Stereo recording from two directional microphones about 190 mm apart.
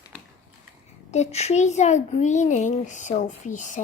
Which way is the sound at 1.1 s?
35° left (ahead or behind).